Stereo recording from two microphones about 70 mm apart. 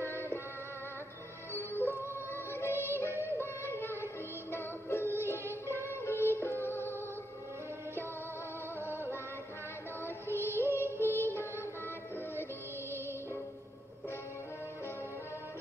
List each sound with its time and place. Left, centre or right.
0.1 s music: left
1.5 s music: left
5.4 s music: right
5.8 s music: left
10.0 s music: left